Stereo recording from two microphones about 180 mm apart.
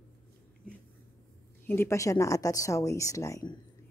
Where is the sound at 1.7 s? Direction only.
15° left (ahead or behind).